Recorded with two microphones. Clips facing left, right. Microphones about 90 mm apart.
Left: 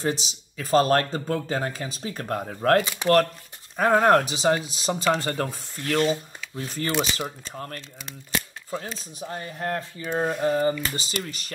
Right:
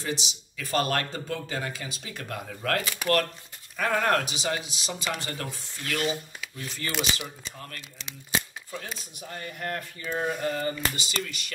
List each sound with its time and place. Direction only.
0.0 s speech: 40° left (ahead or behind)
2.8 s speech: 25° left (ahead or behind)